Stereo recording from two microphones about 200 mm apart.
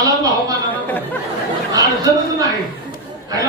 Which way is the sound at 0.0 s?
15° right (ahead or behind).